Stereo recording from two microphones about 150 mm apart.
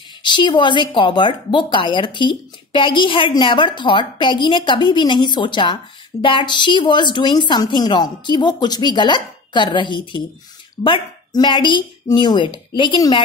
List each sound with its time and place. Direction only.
0.2 s a woman's voice: 30° left (ahead or behind)